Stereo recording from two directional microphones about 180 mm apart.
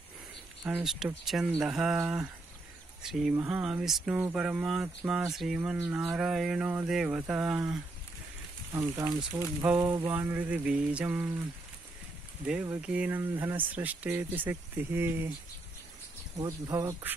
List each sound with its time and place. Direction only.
0.7 s speech: 5° right (ahead or behind)
8.7 s speech: 20° right (ahead or behind)
12.4 s speech: 5° right (ahead or behind)
16.3 s speech: 20° right (ahead or behind)